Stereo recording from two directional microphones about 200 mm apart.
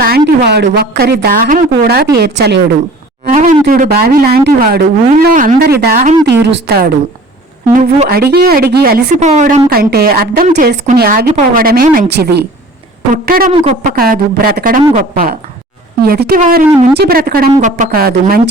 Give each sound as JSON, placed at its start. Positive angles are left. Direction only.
{"t": 0.0, "sound": "a woman's voice", "side_deg": -50}
{"t": 3.3, "sound": "a woman's voice", "side_deg": -40}
{"t": 7.7, "sound": "speech", "side_deg": -40}